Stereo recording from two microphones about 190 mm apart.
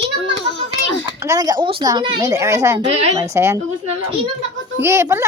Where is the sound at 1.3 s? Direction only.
20° right (ahead or behind).